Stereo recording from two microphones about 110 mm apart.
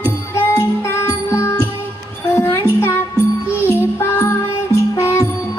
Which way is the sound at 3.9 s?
25° left (ahead or behind).